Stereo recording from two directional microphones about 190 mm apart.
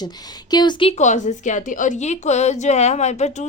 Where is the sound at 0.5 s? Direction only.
20° left (ahead or behind).